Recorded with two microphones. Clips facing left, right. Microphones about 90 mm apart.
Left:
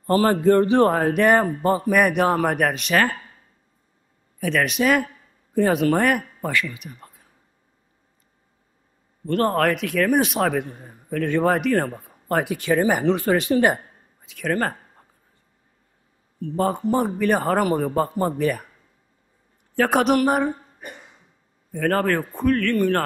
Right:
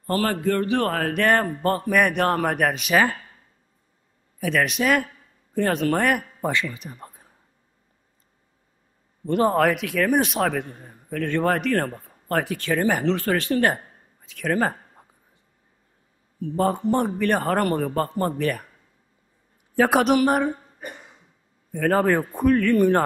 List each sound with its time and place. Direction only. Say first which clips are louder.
0.0 s a man's voice: left 5 dB; 25° left (ahead or behind); by 3.1 s 5° right (ahead or behind)
4.4 s a man's voice: left 1 dB; centre (ahead or behind)
6.4 s speech: even; 25° right (ahead or behind)
9.2 s a man's voice: right 1 dB; 15° right (ahead or behind)
9.5 s a man's voice: even; 5° right (ahead or behind); by 13.7 s 15° left (ahead or behind)
14.2 s a sound: right 1 dB; 5° left (ahead or behind)
16.3 s a man's voice: even; centre (ahead or behind)
19.7 s a man's voice: even; 5° right (ahead or behind)
21.7 s a man's voice: right 1 dB; centre (ahead or behind)
22.0 s a man's voice: right 1 dB; 15° right (ahead or behind)